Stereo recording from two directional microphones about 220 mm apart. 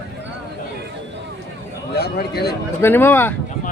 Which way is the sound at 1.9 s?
45° left (ahead or behind).